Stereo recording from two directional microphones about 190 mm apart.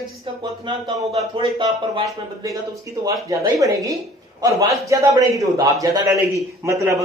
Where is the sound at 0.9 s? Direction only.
25° right (ahead or behind).